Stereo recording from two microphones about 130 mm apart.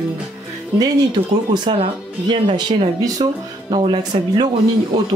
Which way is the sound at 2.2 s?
40° right (ahead or behind).